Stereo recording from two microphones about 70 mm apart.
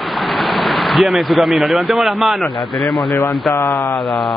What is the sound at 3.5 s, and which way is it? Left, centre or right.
Speech, left.